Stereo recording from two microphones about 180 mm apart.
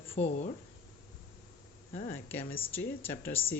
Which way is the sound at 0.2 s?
40° left (ahead or behind).